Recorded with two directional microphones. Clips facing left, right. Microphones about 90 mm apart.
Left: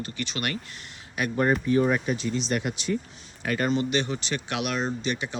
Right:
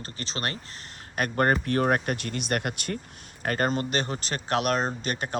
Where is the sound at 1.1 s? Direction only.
50° right (ahead or behind).